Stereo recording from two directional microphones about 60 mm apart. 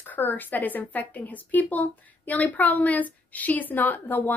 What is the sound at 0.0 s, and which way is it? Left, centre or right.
Speech, left.